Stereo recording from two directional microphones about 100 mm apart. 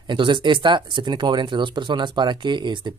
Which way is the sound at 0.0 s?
50° right (ahead or behind).